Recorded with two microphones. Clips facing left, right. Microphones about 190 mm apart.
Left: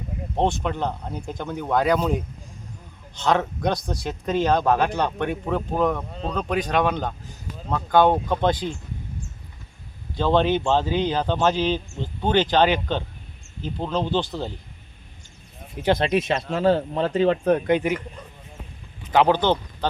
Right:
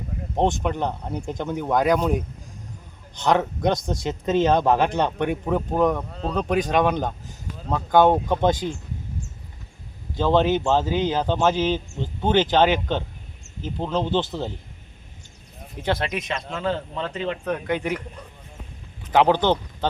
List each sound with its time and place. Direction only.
0.3 s speech: 15° right (ahead or behind)
3.2 s speech: 15° right (ahead or behind)
6.0 s speech: centre (ahead or behind)
6.3 s speech: 15° right (ahead or behind)
10.2 s speech: 10° right (ahead or behind)
16.0 s speech: 30° left (ahead or behind)
19.1 s speech: 15° right (ahead or behind)